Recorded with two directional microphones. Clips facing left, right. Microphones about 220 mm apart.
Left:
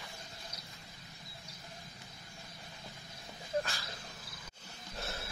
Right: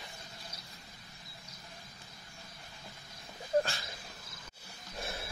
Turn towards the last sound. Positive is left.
turn(degrees=-15)  # may be behind; listen again after turning